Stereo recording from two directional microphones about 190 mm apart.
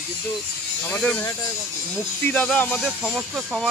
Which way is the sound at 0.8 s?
5° left (ahead or behind).